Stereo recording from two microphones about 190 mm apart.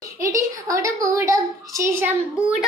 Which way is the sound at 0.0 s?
15° right (ahead or behind).